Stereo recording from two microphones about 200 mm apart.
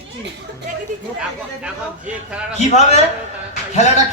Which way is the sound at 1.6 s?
5° right (ahead or behind).